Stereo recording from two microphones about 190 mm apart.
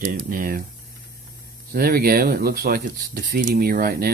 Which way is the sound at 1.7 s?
50° right (ahead or behind).